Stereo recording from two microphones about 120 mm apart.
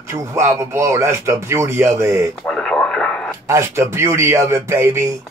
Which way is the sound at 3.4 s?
25° right (ahead or behind).